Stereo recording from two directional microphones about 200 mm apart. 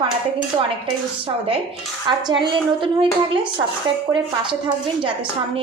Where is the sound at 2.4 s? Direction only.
25° right (ahead or behind).